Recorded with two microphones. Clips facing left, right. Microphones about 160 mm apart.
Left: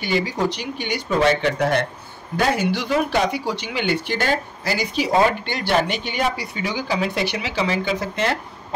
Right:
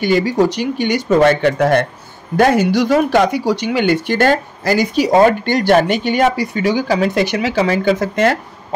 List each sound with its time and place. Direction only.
0.0 s speech: 45° right (ahead or behind)